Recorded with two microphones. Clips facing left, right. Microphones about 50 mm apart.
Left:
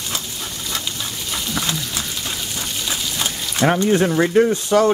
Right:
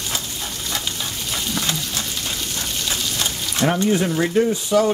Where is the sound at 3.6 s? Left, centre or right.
Left.